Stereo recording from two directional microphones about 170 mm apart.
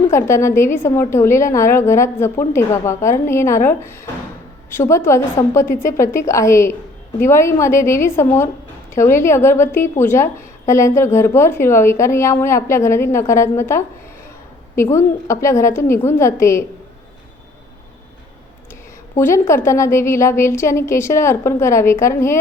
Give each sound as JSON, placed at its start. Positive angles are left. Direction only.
{"t": 0.1, "sound": "a woman's voice", "side_deg": 15}
{"t": 19.1, "sound": "a woman's voice", "side_deg": 15}